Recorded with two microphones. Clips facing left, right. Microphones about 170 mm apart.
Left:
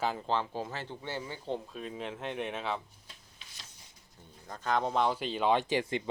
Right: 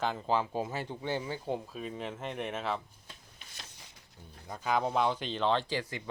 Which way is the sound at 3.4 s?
70° right (ahead or behind).